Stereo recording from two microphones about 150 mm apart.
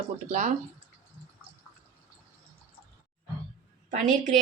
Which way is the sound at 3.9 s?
60° right (ahead or behind).